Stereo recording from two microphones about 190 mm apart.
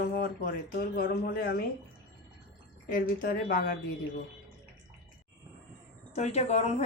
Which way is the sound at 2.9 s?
45° left (ahead or behind).